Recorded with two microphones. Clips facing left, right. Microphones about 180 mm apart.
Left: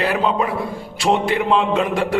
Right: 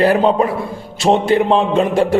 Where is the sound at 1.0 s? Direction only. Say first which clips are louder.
Right 5 dB; 25° right (ahead or behind).